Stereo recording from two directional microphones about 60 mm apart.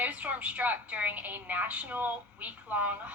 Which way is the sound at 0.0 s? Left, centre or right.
Right.